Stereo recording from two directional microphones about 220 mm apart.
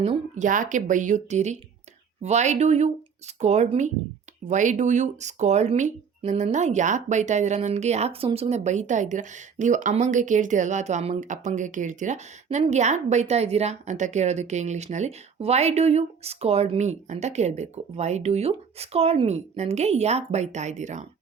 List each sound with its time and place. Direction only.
0.0 s speech: 30° right (ahead or behind)